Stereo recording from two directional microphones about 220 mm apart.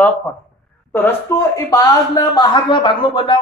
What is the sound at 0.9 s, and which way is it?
Speech, 10° left (ahead or behind).